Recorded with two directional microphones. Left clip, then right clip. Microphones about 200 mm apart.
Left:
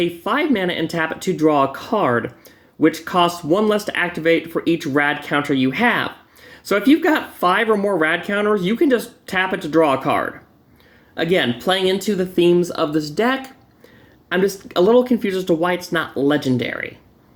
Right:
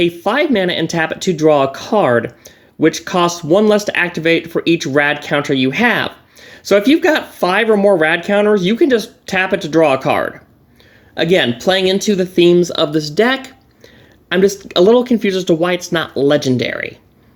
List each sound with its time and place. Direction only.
0.0 s speech: 40° right (ahead or behind)